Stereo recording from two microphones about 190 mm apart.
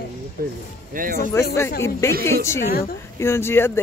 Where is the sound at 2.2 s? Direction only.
15° left (ahead or behind).